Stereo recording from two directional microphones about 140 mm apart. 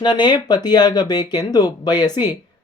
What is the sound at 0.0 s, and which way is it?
Speech, 30° left (ahead or behind).